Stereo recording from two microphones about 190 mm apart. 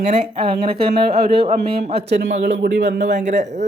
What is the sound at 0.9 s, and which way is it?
A man's voice, 55° right (ahead or behind).